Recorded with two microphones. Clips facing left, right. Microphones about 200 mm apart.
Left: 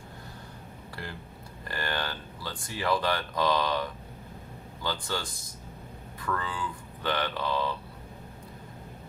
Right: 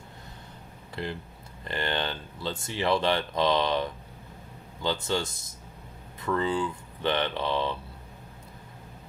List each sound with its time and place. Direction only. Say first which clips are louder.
1.0 s speech: right 8 dB; 20° right (ahead or behind)